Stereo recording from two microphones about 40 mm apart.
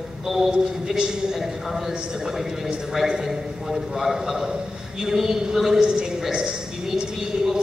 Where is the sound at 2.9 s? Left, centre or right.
Centre.